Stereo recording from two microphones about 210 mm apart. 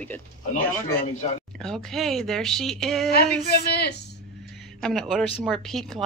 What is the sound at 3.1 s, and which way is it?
Speech, 50° left (ahead or behind).